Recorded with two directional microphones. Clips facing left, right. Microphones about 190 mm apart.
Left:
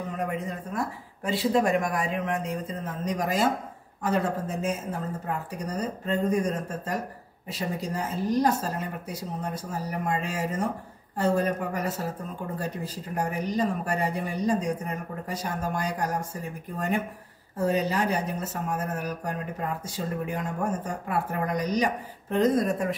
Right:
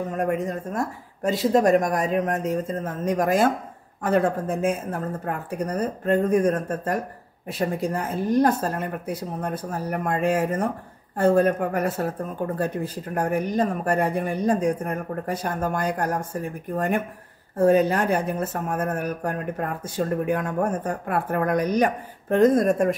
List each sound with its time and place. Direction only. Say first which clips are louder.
0.2 s speech: right 7 dB; 45° right (ahead or behind)